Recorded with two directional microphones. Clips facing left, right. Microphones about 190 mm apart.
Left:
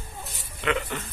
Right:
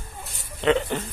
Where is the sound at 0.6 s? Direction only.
30° right (ahead or behind).